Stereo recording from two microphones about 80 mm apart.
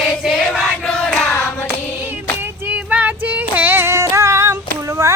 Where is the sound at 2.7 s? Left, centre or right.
Centre; by 4.6 s right.